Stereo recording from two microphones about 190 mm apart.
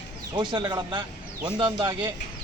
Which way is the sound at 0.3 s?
25° right (ahead or behind).